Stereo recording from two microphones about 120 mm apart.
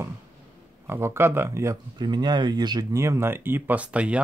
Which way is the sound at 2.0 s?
35° right (ahead or behind).